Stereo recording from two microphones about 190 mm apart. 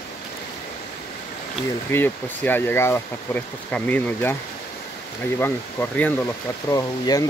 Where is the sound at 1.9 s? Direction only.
10° left (ahead or behind).